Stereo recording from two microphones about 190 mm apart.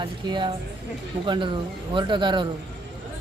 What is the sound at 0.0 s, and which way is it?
Speech, 25° right (ahead or behind).